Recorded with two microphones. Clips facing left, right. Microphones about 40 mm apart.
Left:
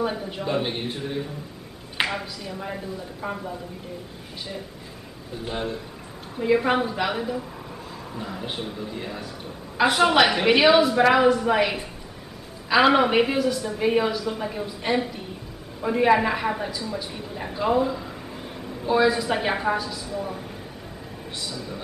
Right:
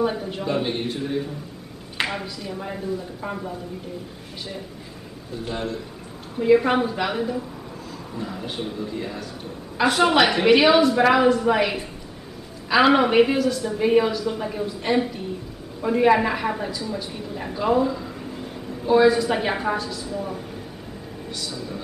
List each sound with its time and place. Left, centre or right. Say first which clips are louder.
0.0 s a woman's voice: right 3 dB; centre
5.5 s a man's voice: right 1 dB; centre
6.3 s a woman's voice: right 3 dB; centre